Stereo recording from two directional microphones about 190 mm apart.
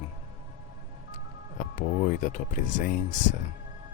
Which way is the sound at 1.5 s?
40° left (ahead or behind).